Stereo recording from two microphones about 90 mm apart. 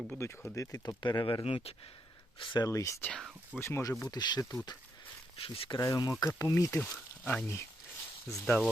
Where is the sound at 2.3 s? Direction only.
65° left (ahead or behind).